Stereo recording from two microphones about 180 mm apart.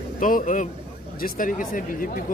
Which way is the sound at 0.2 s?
45° left (ahead or behind).